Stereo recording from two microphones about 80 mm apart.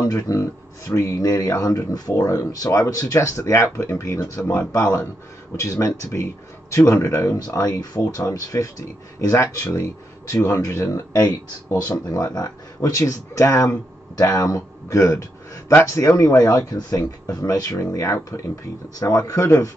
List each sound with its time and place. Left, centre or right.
0.0 s speech: left
11.1 s speech: left